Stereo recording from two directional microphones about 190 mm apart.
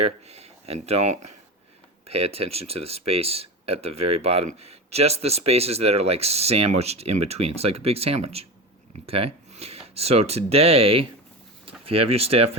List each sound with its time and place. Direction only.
0.0 s speech: 35° right (ahead or behind)